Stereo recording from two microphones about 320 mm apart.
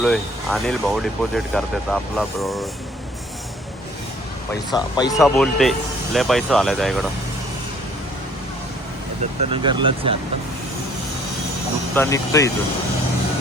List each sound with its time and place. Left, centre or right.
0.0 s speech: centre
4.7 s speech: centre
5.2 s speech: centre
9.4 s speech: centre
11.9 s speech: centre